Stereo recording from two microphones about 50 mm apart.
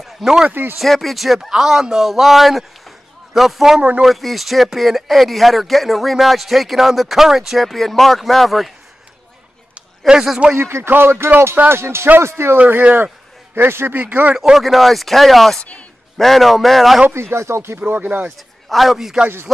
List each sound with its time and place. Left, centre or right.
0.0 s a sound: centre
0.5 s speech: right
0.7 s speech: centre
10.0 s speech: centre
10.6 s speech: right
11.7 s speech: right
12.5 s speech: right
13.6 s speech: right
13.9 s speech: right
14.3 s speech: centre
14.6 s speech: centre
17.1 s speech: right
17.7 s speech: right
18.7 s speech: centre